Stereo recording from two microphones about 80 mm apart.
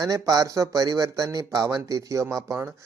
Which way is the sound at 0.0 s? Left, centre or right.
Right.